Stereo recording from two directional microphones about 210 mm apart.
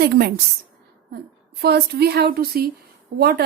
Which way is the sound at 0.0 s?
50° right (ahead or behind).